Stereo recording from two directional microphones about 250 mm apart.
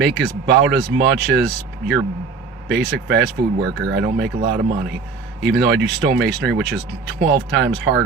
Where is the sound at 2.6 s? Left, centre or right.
Right.